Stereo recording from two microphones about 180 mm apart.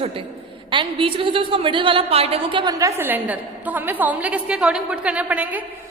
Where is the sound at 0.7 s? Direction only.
30° right (ahead or behind).